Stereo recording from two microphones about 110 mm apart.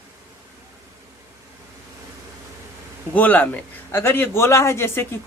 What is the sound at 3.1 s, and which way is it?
A man's voice, 15° left (ahead or behind).